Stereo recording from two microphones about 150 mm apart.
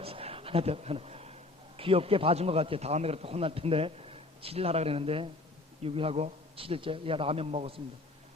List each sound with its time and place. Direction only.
0.0 s a man's voice: 40° right (ahead or behind)